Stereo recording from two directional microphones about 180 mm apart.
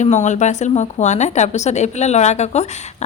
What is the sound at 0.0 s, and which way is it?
A woman's voice, 40° left (ahead or behind).